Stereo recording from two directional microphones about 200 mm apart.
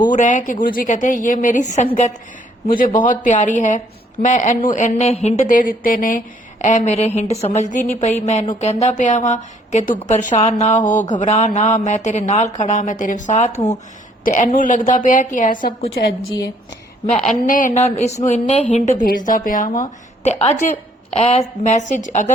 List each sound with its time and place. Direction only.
0.1 s speech: 40° left (ahead or behind)
17.4 s a woman's voice: 40° left (ahead or behind)